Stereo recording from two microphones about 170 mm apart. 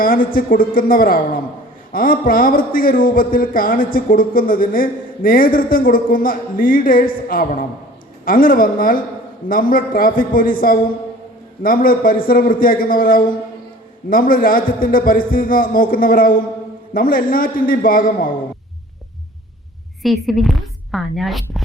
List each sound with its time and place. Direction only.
0.0 s speech: 55° left (ahead or behind)
20.0 s a woman's voice: centre (ahead or behind)